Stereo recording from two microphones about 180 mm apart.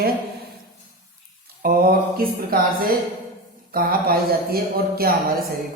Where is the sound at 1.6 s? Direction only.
55° right (ahead or behind).